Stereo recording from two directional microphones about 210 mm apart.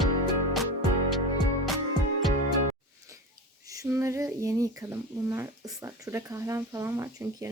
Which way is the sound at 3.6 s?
15° right (ahead or behind).